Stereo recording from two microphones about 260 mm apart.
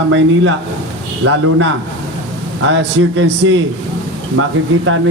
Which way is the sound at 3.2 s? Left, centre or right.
Right.